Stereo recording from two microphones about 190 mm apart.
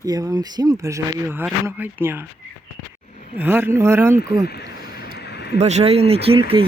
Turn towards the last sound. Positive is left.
turn(degrees=-30)  # may be behind; listen again after turning